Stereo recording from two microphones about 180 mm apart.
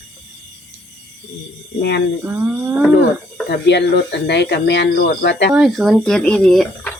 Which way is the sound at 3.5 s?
70° left (ahead or behind).